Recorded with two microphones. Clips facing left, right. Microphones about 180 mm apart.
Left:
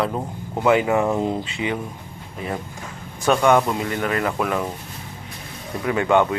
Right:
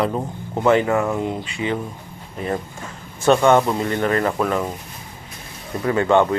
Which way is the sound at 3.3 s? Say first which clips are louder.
Right 2 dB; 25° right (ahead or behind).